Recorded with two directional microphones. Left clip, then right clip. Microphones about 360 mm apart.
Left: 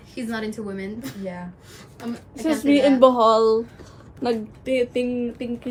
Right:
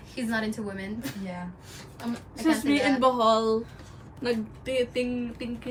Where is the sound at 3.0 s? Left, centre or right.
Centre.